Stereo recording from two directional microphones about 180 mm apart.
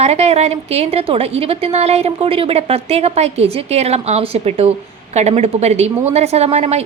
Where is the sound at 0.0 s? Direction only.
35° right (ahead or behind).